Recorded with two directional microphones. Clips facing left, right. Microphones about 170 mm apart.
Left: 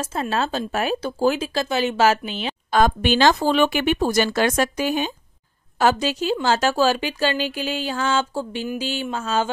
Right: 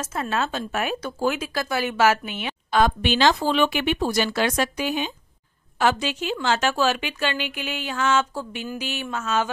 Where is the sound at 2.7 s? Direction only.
45° left (ahead or behind).